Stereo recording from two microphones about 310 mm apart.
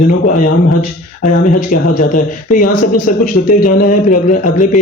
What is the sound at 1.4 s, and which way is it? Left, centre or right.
Speech, left.